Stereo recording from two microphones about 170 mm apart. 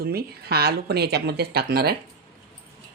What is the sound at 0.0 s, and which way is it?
Speech, 65° right (ahead or behind).